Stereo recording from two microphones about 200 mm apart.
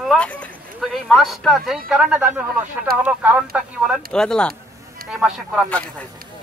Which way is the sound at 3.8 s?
5° left (ahead or behind).